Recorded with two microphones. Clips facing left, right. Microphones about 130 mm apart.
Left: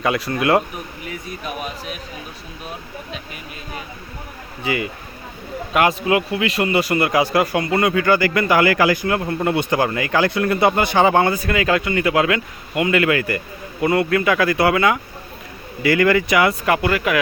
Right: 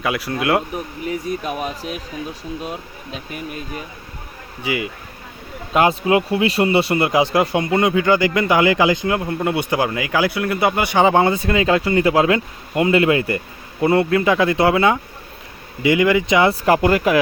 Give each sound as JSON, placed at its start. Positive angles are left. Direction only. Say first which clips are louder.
{"t": 0.0, "sound": "speech", "louder": "left 2 dB", "side_deg": -5}
{"t": 4.6, "sound": "speech", "louder": "even", "side_deg": -15}
{"t": 5.7, "sound": "speech", "louder": "right 2 dB", "side_deg": -25}
{"t": 15.8, "sound": "speech", "louder": "even", "side_deg": -15}